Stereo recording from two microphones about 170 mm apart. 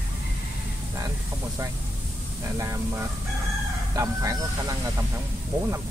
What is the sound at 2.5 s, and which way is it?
Speech, 20° right (ahead or behind).